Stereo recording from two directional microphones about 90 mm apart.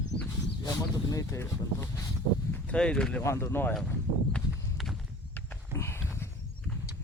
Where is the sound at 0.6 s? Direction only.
40° left (ahead or behind).